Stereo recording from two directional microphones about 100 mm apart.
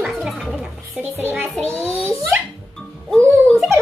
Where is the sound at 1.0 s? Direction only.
25° right (ahead or behind).